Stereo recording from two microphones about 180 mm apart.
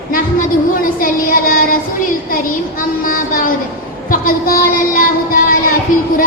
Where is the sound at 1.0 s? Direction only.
50° left (ahead or behind).